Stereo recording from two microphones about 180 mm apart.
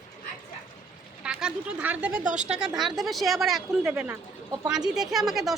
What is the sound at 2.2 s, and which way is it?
Speech, 40° right (ahead or behind).